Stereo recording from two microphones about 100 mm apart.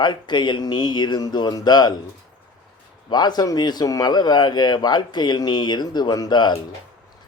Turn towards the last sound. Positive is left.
turn(degrees=45)  # may be behind; listen again after turning